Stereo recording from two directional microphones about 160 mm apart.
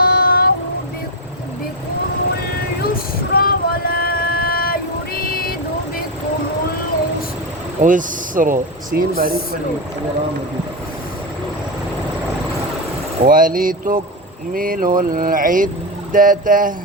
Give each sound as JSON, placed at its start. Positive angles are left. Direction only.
{"t": 0.0, "sound": "music", "side_deg": 70}
{"t": 2.8, "sound": "vehicle", "side_deg": 65}
{"t": 7.8, "sound": "speech", "side_deg": -55}
{"t": 13.2, "sound": "speech", "side_deg": -60}